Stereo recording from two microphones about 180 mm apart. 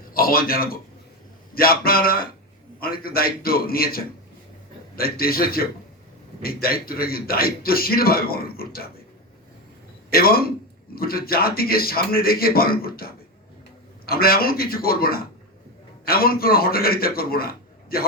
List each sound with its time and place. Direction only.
0.1 s a man's voice: 55° left (ahead or behind)
10.1 s a man's voice: 55° left (ahead or behind)
14.1 s a man's voice: 55° left (ahead or behind)